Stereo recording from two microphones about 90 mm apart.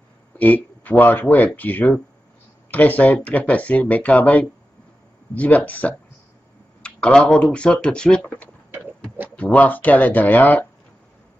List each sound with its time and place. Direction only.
0.8 s speech: 20° left (ahead or behind)
9.4 s speech: 15° left (ahead or behind)